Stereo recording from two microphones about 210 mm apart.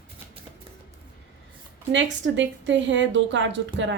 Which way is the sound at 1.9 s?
60° right (ahead or behind).